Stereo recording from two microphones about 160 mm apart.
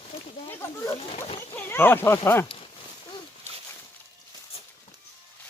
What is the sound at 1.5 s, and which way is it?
Speech, 15° left (ahead or behind).